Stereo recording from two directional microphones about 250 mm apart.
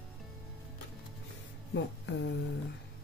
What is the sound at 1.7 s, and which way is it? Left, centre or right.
Speech, left.